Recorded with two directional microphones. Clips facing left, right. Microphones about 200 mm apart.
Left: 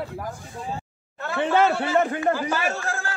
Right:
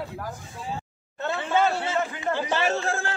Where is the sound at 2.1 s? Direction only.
50° left (ahead or behind).